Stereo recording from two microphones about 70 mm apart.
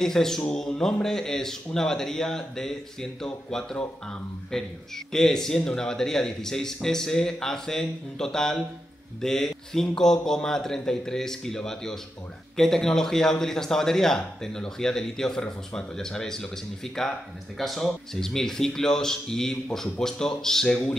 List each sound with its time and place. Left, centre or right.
0.0 s a man's voice: centre
3.7 s speech: left
4.5 s a man's voice: centre